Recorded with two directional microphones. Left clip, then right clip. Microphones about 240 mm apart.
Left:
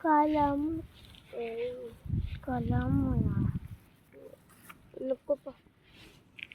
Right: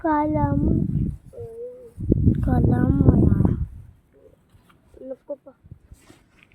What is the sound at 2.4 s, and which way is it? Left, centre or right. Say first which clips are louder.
Speech: right 8 dB; right.